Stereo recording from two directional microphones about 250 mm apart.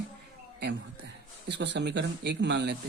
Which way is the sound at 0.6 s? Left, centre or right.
Right.